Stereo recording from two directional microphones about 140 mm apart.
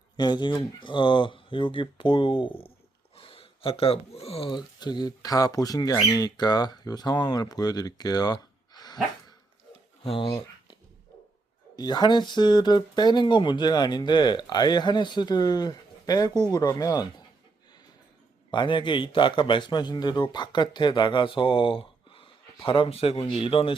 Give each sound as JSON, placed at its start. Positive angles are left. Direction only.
{"t": 0.2, "sound": "a man's voice", "side_deg": 30}
{"t": 10.0, "sound": "speech", "side_deg": 40}
{"t": 10.2, "sound": "a sound", "side_deg": 25}
{"t": 11.8, "sound": "a man's voice", "side_deg": 30}
{"t": 18.5, "sound": "a man's voice", "side_deg": 35}